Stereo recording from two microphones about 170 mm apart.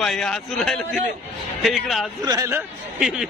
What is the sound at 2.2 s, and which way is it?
Speech, 20° right (ahead or behind).